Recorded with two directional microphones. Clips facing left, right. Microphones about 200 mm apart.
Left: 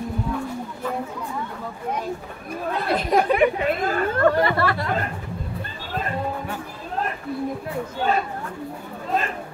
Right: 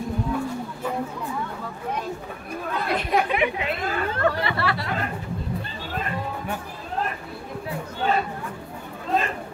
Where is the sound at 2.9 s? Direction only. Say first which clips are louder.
Left 4 dB; 40° left (ahead or behind).